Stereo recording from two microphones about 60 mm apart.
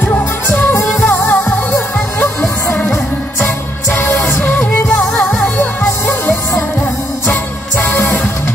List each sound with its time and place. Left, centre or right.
0.1 s music: left
1.0 s music: left
4.4 s music: left